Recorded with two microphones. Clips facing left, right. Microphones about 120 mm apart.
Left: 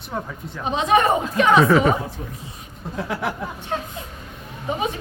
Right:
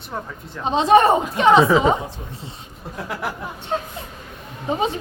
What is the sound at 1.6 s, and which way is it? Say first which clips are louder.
Speech: even; 15° right (ahead or behind).